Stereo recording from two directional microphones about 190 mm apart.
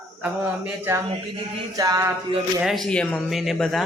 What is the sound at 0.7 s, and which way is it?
Speech, 10° right (ahead or behind).